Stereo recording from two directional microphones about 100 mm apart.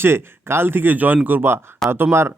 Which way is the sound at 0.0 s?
25° right (ahead or behind).